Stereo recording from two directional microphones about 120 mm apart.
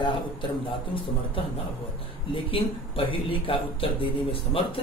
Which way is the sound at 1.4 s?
50° left (ahead or behind).